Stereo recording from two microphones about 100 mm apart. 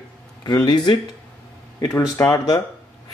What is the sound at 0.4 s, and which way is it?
Speech, 45° left (ahead or behind).